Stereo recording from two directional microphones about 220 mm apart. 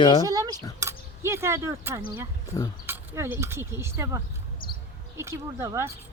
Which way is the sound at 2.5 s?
15° left (ahead or behind).